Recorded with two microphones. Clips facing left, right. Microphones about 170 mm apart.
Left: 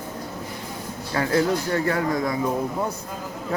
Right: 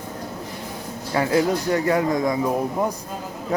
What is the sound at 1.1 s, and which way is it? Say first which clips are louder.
Speech: right 2 dB; 20° right (ahead or behind).